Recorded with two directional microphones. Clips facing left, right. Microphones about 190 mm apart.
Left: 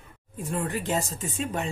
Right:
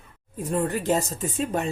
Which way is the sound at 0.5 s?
40° right (ahead or behind).